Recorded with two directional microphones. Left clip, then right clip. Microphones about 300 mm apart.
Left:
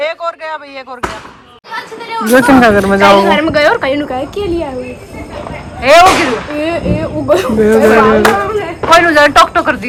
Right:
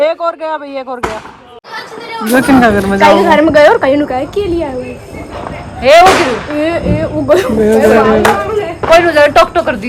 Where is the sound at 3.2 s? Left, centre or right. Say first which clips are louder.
Right 3 dB; right.